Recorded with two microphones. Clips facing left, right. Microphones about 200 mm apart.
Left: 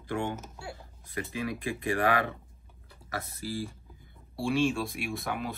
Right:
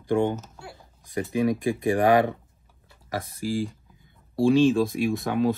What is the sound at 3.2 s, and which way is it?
Speech, 15° right (ahead or behind).